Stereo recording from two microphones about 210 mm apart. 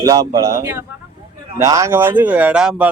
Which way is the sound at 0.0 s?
15° right (ahead or behind).